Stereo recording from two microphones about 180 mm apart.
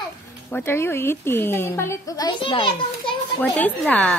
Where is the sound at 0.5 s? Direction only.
10° left (ahead or behind); by 3.2 s 30° left (ahead or behind).